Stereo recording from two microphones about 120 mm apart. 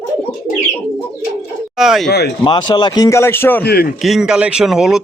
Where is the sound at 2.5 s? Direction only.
40° left (ahead or behind).